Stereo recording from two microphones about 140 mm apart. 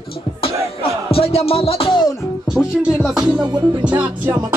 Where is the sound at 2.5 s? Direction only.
5° right (ahead or behind).